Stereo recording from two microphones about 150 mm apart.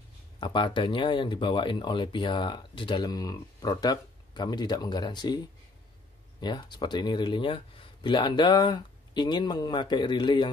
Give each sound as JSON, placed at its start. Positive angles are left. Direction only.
{"t": 0.4, "sound": "speech", "side_deg": 30}
{"t": 6.4, "sound": "speech", "side_deg": 30}